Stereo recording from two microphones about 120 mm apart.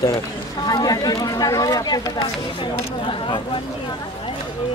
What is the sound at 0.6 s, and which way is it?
Speech, 30° left (ahead or behind).